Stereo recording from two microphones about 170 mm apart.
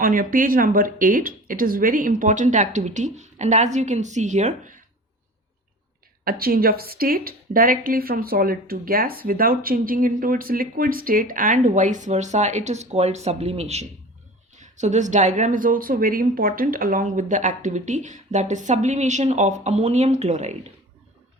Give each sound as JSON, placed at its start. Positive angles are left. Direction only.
{"t": 0.0, "sound": "speech", "side_deg": -55}
{"t": 6.2, "sound": "a woman's voice", "side_deg": -60}